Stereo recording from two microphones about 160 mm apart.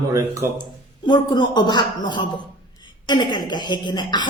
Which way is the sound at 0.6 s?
25° left (ahead or behind).